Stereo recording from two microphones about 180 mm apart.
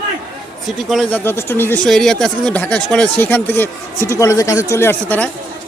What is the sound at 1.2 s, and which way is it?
Speech, 15° left (ahead or behind).